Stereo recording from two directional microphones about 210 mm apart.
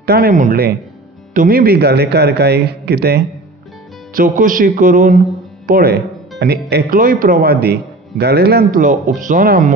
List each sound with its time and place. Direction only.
0.0 s a man's voice: 45° right (ahead or behind)